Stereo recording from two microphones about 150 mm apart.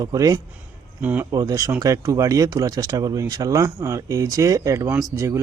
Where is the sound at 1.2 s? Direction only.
25° right (ahead or behind).